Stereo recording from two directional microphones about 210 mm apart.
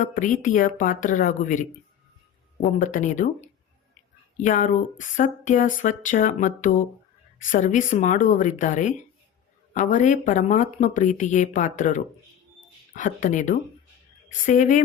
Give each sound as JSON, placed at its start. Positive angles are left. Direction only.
{"t": 0.0, "sound": "speech", "side_deg": 35}